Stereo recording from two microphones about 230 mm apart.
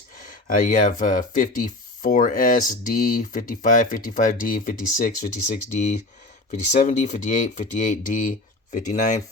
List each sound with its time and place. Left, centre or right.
0.2 s speech: left